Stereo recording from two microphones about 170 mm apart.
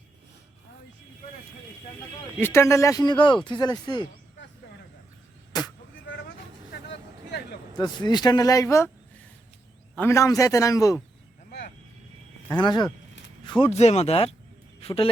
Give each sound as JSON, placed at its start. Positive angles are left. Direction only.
{"t": 2.4, "sound": "speech", "side_deg": 15}
{"t": 7.8, "sound": "speech", "side_deg": 25}
{"t": 9.9, "sound": "speech", "side_deg": 15}
{"t": 12.5, "sound": "speech", "side_deg": 25}